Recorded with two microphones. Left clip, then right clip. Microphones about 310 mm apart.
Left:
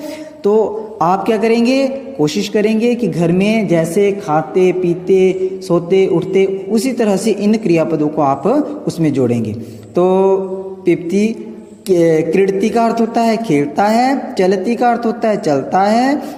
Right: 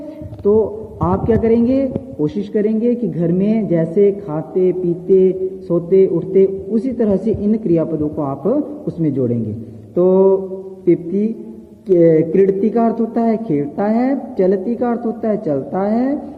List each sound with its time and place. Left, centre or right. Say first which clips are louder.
0.4 s a man's voice: left 2 dB; left